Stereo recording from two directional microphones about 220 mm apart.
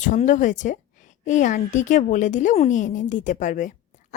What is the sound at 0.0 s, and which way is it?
A woman's voice, 35° left (ahead or behind).